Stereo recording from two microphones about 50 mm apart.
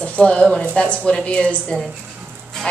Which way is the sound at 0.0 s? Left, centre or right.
Left.